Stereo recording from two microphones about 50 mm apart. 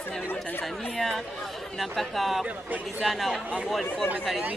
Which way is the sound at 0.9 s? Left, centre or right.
Centre.